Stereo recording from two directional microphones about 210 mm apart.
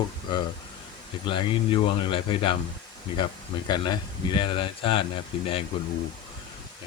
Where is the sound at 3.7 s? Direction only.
20° left (ahead or behind).